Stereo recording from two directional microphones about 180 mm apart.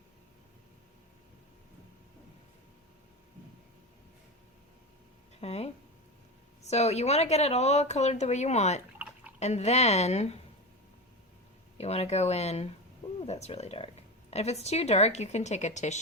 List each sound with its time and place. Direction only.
5.4 s a sound: 35° left (ahead or behind)
6.7 s a woman's voice: 35° left (ahead or behind)
9.0 s drip: 10° right (ahead or behind)
9.4 s a woman's voice: 40° left (ahead or behind)
11.8 s a woman's voice: 35° left (ahead or behind)